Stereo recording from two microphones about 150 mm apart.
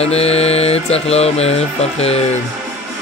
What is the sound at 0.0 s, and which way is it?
Mantra, 45° left (ahead or behind).